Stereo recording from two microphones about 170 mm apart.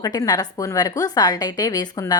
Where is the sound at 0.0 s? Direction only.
20° left (ahead or behind).